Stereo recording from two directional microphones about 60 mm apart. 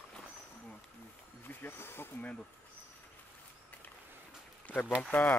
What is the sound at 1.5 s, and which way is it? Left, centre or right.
Speech, left.